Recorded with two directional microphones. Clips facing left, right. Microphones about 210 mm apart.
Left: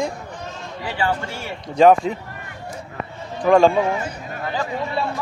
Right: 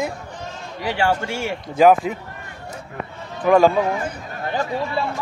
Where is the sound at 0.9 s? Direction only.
80° right.